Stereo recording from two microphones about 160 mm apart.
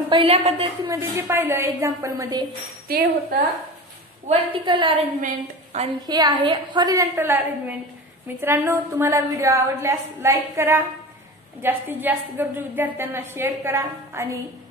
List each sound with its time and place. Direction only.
0.1 s a woman's voice: 40° right (ahead or behind)
0.8 s a woman's voice: 15° right (ahead or behind)
2.9 s speech: 70° right (ahead or behind)
4.3 s a woman's voice: 35° right (ahead or behind)
5.2 s a woman's voice: 45° right (ahead or behind)
6.0 s a woman's voice: 25° right (ahead or behind)